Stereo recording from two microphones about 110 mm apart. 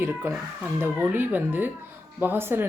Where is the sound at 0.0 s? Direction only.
15° right (ahead or behind).